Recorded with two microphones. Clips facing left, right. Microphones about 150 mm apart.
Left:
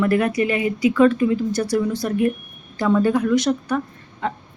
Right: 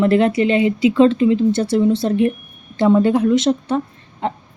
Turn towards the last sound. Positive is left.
turn(degrees=-25)  # may be behind; listen again after turning